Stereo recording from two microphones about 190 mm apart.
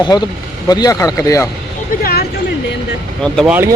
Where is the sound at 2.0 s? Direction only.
55° left (ahead or behind).